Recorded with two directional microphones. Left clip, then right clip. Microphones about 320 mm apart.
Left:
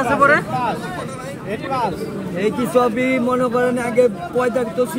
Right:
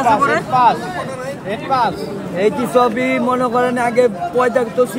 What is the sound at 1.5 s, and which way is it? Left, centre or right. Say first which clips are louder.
Speech: right 5 dB; right.